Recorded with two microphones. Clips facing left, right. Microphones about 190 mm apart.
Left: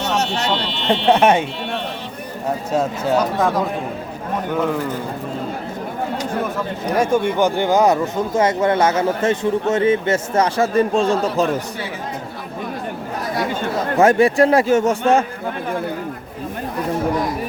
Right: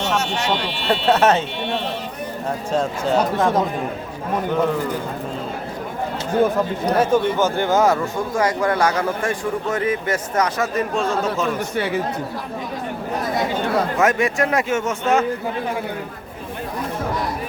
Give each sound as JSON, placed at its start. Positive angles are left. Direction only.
{"t": 0.5, "sound": "speech", "side_deg": -10}
{"t": 1.0, "sound": "speech", "side_deg": 15}
{"t": 2.7, "sound": "speech", "side_deg": 10}
{"t": 6.9, "sound": "speech", "side_deg": 10}
{"t": 14.0, "sound": "a man's voice", "side_deg": 30}